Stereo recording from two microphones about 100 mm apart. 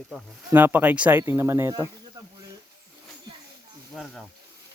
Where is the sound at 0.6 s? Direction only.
20° right (ahead or behind).